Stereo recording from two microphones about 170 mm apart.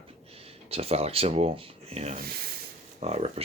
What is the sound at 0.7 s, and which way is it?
Speech, 35° right (ahead or behind).